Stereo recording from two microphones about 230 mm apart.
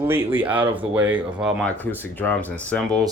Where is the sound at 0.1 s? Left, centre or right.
Centre.